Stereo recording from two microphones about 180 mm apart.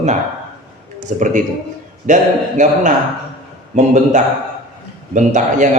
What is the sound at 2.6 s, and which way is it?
Speech, 45° right (ahead or behind).